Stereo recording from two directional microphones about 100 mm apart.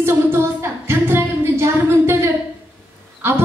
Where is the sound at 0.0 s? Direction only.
25° right (ahead or behind).